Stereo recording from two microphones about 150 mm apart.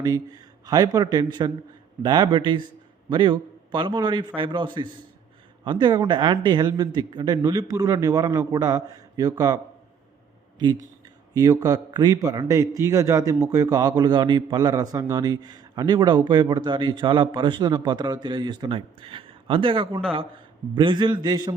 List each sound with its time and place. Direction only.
0.0 s a man's voice: 25° right (ahead or behind)
11.3 s a man's voice: 20° right (ahead or behind)